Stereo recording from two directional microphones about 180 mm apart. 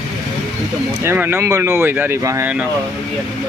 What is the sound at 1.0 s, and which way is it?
A man's voice, 10° right (ahead or behind).